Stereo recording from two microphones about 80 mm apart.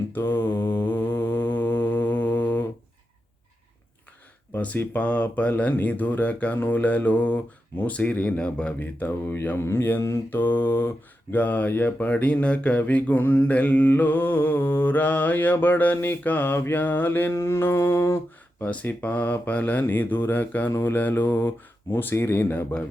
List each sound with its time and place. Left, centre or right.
0.1 s mantra: left
4.5 s mantra: left
18.6 s mantra: centre